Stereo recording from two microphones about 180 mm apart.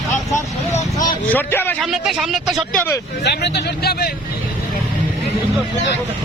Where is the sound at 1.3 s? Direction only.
10° left (ahead or behind).